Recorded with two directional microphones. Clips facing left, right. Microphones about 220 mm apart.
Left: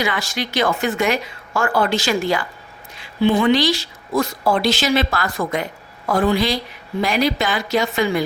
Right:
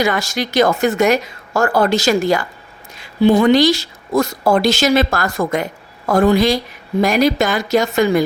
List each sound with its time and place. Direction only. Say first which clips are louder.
0.0 s speech: right 5 dB; 45° right (ahead or behind)